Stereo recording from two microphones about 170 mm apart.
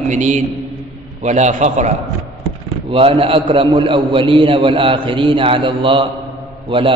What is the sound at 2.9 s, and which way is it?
A man's voice, 35° right (ahead or behind).